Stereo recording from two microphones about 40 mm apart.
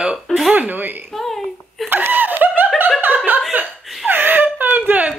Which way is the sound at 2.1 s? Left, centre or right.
Right.